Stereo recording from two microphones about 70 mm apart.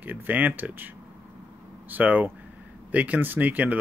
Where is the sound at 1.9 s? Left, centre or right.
Right.